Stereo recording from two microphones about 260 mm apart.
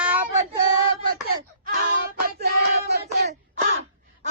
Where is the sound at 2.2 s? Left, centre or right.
Right.